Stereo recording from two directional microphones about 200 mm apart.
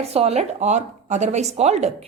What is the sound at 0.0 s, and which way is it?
A woman's voice, 30° right (ahead or behind).